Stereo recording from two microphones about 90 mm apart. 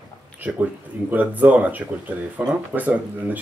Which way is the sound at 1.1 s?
20° right (ahead or behind).